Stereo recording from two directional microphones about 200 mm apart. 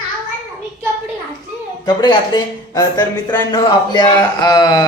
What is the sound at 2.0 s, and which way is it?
A man's voice, 20° left (ahead or behind).